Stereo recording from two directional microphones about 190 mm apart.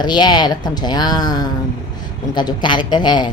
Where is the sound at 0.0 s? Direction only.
20° left (ahead or behind).